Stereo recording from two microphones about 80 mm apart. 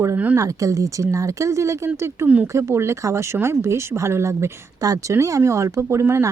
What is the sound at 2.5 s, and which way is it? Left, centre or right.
A woman's voice, right.